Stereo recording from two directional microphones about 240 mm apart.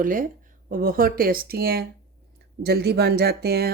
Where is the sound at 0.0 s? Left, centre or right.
Right.